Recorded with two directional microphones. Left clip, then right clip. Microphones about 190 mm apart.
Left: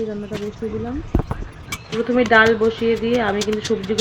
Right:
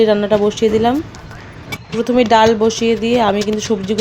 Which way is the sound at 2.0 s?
25° right (ahead or behind).